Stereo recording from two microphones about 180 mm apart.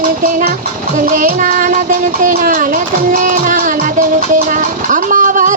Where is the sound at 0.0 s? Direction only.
45° right (ahead or behind).